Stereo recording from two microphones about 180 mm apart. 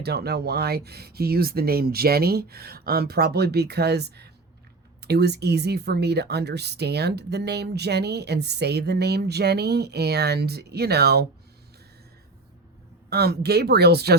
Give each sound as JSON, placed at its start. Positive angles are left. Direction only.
{"t": 0.0, "sound": "speech", "side_deg": -65}
{"t": 13.1, "sound": "speech", "side_deg": -65}